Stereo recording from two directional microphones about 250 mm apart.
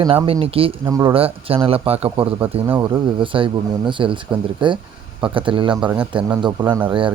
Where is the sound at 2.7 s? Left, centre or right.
Centre.